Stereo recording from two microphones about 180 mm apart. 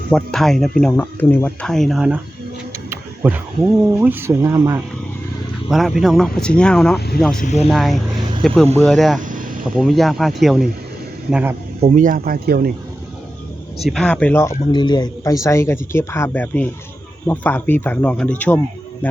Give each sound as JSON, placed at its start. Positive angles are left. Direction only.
{"t": 0.1, "sound": "speech", "side_deg": 5}
{"t": 2.9, "sound": "a sound", "side_deg": -10}
{"t": 3.9, "sound": "speech", "side_deg": -10}
{"t": 5.7, "sound": "speech", "side_deg": 0}
{"t": 7.3, "sound": "speech", "side_deg": 40}
{"t": 7.7, "sound": "speech", "side_deg": 0}
{"t": 9.2, "sound": "vehicle", "side_deg": -50}
{"t": 9.7, "sound": "speech", "side_deg": 0}
{"t": 11.8, "sound": "speech", "side_deg": -45}
{"t": 13.8, "sound": "speech", "side_deg": 5}
{"t": 14.7, "sound": "speech", "side_deg": 25}